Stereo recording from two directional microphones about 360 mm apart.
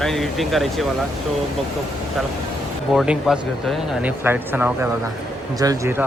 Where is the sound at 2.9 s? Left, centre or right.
Centre.